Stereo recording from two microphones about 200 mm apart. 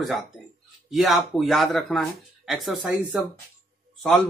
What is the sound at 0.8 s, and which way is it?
Speech, centre (ahead or behind).